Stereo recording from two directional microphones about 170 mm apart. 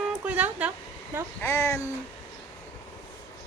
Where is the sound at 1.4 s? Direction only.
15° left (ahead or behind).